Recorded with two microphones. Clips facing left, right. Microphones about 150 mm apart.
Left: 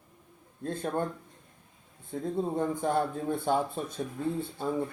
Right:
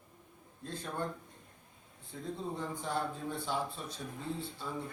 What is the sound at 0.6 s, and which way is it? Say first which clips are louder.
Speech: left 9 dB; 50° left (ahead or behind).